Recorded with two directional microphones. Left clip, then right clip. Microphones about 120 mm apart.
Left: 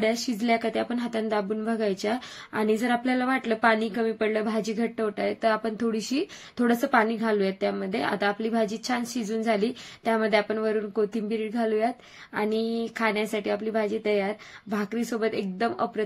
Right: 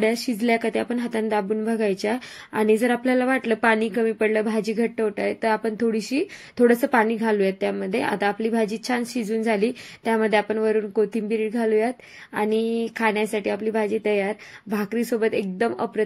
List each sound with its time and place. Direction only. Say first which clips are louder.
0.0 s speech: right 4 dB; 25° right (ahead or behind)